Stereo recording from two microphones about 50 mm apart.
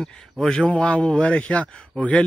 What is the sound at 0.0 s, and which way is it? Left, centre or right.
Speech, centre.